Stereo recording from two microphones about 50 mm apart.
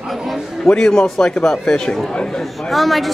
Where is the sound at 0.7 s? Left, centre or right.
Centre.